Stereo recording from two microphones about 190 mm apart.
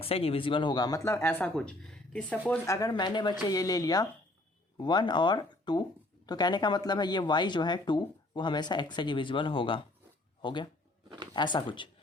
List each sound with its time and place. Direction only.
0.0 s speech: 30° left (ahead or behind); by 2.4 s 5° left (ahead or behind)
2.6 s speech: 20° left (ahead or behind)